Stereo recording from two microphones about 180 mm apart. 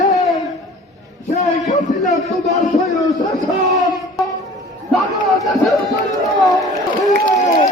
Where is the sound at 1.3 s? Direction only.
40° left (ahead or behind).